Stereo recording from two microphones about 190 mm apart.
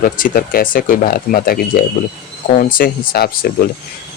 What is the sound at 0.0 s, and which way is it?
Speech, 50° left (ahead or behind).